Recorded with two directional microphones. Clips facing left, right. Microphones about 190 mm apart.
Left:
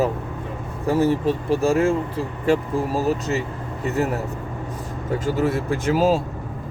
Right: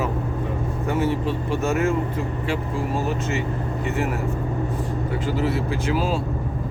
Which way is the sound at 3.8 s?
40° left (ahead or behind).